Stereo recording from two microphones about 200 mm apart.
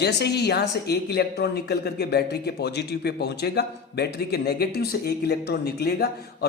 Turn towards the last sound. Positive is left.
turn(degrees=50)  # may be behind; listen again after turning